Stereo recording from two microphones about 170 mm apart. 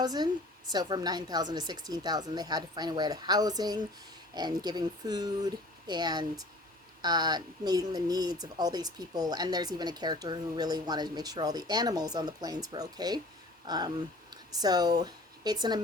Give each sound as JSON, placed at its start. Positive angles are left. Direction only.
{"t": 0.0, "sound": "speech", "side_deg": -25}